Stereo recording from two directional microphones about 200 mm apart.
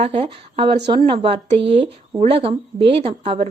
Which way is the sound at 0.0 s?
30° right (ahead or behind).